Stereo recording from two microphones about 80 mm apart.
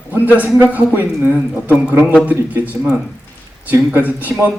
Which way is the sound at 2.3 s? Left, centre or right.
Centre.